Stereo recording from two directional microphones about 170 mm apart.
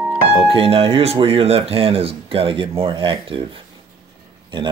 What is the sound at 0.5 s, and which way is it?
Speech, 35° right (ahead or behind).